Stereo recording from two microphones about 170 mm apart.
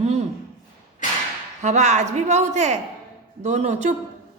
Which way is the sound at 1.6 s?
45° right (ahead or behind).